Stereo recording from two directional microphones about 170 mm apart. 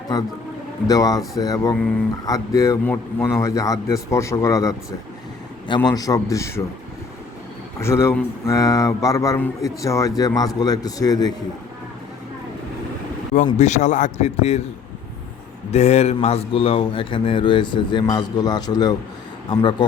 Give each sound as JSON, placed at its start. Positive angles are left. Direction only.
{"t": 0.9, "sound": "a man's voice", "side_deg": 20}
{"t": 7.8, "sound": "a man's voice", "side_deg": 15}
{"t": 13.3, "sound": "a man's voice", "side_deg": 45}
{"t": 15.7, "sound": "speech", "side_deg": 40}